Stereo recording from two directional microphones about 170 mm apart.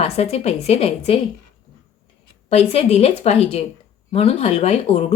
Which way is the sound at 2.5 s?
35° left (ahead or behind).